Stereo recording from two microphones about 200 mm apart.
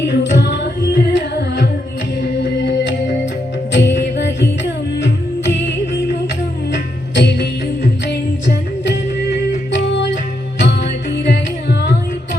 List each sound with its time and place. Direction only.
0.0 s music: 60° left (ahead or behind)
5.6 s music: 60° left (ahead or behind)
7.2 s music: 60° left (ahead or behind)
9.7 s music: 65° left (ahead or behind)